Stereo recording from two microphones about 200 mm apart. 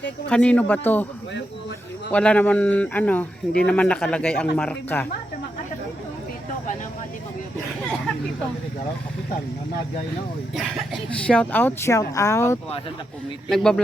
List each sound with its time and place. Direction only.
0.3 s speech: 5° left (ahead or behind)
2.1 s speech: 5° left (ahead or behind)
10.5 s speech: centre (ahead or behind)
13.5 s speech: 5° left (ahead or behind)